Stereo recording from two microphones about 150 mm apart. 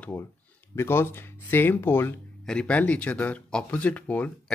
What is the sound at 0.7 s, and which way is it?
Speech, 15° left (ahead or behind).